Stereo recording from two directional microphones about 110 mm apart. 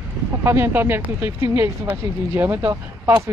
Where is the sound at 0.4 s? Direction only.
25° right (ahead or behind).